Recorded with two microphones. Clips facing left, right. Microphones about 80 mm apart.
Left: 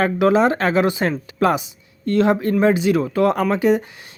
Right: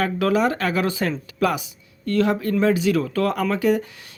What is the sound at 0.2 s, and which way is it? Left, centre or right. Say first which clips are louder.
Speech: left 5 dB; left.